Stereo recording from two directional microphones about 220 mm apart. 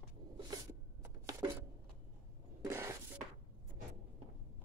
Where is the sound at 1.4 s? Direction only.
20° right (ahead or behind).